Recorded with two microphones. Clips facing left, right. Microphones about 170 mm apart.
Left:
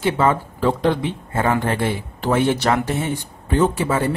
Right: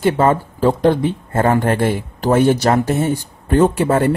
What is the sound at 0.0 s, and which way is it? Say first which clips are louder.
Speech: right 4 dB; 45° right (ahead or behind).